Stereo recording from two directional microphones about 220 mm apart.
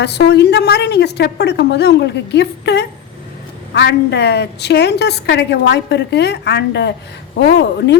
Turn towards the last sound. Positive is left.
turn(degrees=50)  # may be behind; listen again after turning